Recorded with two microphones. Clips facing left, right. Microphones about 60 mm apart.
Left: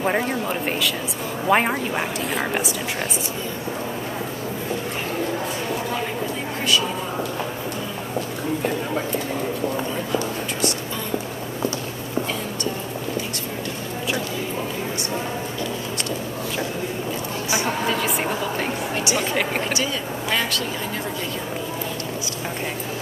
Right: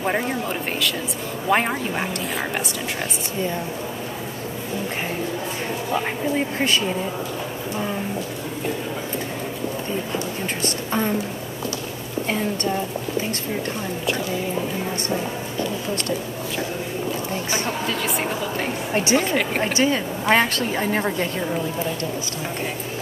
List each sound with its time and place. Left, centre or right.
0.0 s speech: centre
17.8 s a sound: centre
18.9 s a woman's voice: right